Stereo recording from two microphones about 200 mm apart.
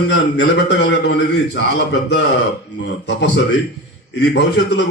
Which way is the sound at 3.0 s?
60° left (ahead or behind).